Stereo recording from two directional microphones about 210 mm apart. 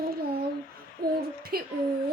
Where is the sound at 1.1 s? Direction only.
45° right (ahead or behind).